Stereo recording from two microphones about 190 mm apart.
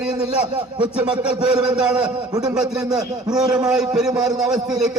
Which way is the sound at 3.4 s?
20° right (ahead or behind).